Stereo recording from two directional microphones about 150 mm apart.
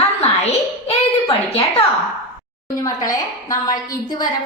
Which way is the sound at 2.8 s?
25° left (ahead or behind).